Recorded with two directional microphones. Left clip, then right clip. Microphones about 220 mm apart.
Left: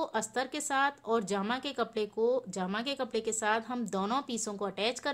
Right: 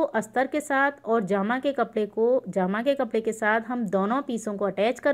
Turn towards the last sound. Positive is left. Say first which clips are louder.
# right 9 dB
turn(degrees=-10)  # may be behind; listen again after turning